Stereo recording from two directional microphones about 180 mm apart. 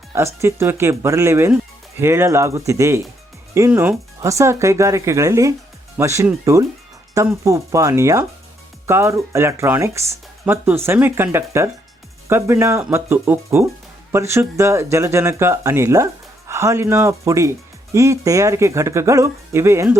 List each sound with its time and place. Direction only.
0.3 s speech: 15° right (ahead or behind)